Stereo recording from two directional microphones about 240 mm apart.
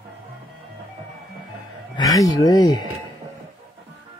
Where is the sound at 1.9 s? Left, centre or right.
Centre.